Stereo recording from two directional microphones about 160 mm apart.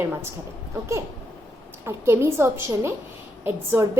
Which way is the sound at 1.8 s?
15° right (ahead or behind).